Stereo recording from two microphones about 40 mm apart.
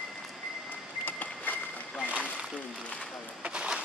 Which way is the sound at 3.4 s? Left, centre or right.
Right.